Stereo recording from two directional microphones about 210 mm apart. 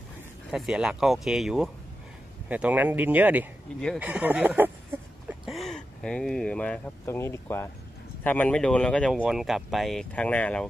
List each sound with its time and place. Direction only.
0.5 s speech: 5° right (ahead or behind)